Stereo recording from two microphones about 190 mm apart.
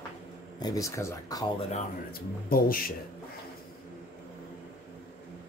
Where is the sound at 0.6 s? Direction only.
20° left (ahead or behind).